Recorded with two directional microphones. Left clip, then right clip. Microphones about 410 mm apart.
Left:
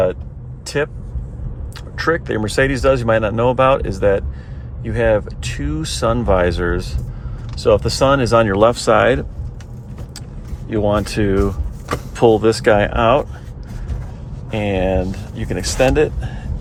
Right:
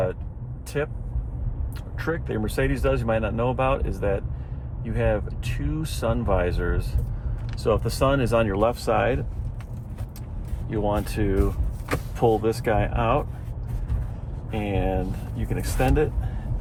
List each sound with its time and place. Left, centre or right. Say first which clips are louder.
0.6 s vehicle: left 8 dB; left
2.0 s speech: left 10 dB; left
10.7 s speech: left 8 dB; left
14.5 s speech: left 9 dB; left